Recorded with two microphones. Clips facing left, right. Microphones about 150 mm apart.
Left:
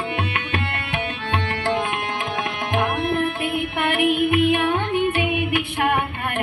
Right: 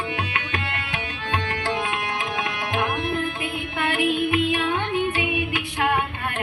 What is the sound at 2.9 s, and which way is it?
Music, 30° left (ahead or behind).